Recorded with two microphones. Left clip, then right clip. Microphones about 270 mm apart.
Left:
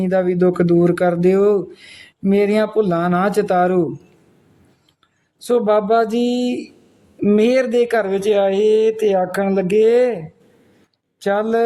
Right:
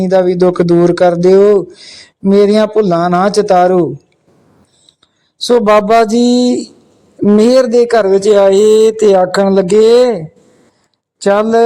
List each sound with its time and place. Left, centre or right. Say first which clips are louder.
0.0 s speech: right 7 dB; centre
5.5 s speech: right 7 dB; right
11.2 s speech: right 8 dB; right